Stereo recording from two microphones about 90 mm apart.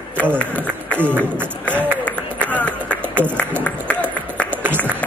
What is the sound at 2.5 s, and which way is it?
Music, 15° left (ahead or behind).